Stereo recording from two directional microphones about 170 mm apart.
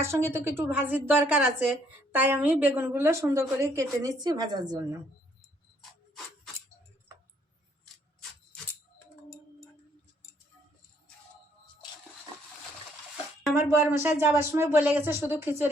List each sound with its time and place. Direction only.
0.0 s a woman's voice: 15° right (ahead or behind)
13.5 s a woman's voice: 15° right (ahead or behind)